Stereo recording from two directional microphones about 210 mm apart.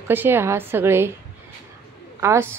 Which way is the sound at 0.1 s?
10° right (ahead or behind).